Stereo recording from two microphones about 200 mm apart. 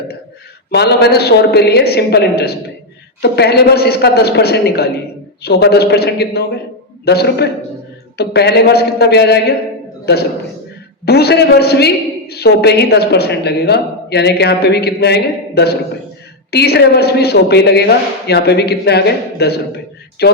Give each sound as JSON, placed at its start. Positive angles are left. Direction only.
{"t": 0.7, "sound": "a woman's voice", "side_deg": 55}